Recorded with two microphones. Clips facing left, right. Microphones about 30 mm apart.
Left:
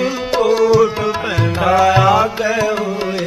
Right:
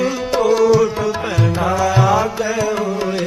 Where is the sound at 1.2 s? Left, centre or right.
Left.